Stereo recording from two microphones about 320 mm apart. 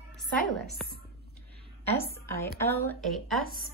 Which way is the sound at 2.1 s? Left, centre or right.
Centre.